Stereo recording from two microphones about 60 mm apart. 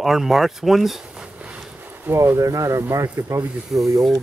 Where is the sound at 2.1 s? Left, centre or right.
Right.